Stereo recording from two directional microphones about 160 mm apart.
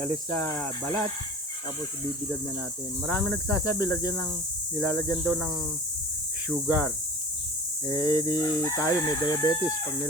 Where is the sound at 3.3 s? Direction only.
20° left (ahead or behind).